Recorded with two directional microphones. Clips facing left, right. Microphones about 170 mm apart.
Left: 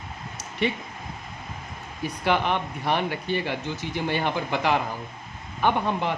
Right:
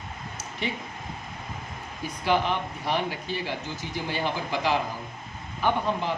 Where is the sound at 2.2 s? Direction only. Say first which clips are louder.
Left 1 dB; 60° left (ahead or behind).